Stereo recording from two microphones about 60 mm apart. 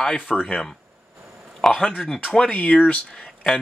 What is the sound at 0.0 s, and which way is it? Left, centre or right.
Speech, centre.